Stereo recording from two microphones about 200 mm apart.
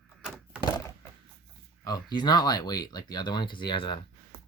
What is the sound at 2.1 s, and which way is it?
Speech, 20° left (ahead or behind).